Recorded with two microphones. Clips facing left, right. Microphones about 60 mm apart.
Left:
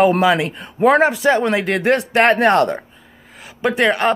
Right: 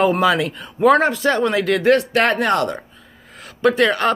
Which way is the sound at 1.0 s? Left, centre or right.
Centre.